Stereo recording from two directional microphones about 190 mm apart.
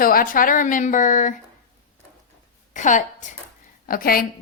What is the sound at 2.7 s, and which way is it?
A woman's voice, 40° left (ahead or behind).